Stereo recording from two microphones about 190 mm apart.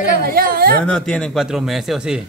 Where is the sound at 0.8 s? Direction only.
5° left (ahead or behind).